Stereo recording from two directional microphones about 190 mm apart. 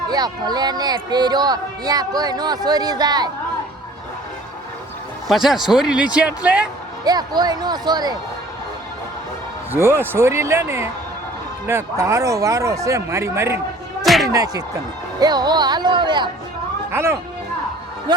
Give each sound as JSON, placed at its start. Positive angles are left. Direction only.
{"t": 0.1, "sound": "speech", "side_deg": -20}
{"t": 5.3, "sound": "speech", "side_deg": 0}
{"t": 7.0, "sound": "speech", "side_deg": -20}
{"t": 9.7, "sound": "speech", "side_deg": -10}
{"t": 14.0, "sound": "a sound", "side_deg": 0}
{"t": 14.3, "sound": "speech", "side_deg": -20}
{"t": 16.9, "sound": "speech", "side_deg": -15}